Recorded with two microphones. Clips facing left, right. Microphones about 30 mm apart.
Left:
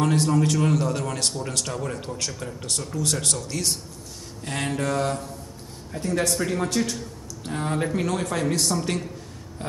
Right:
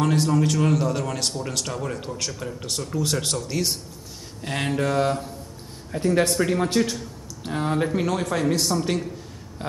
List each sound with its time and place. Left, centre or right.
0.0 s a man's voice: centre; by 6.3 s right
6.3 s speech: centre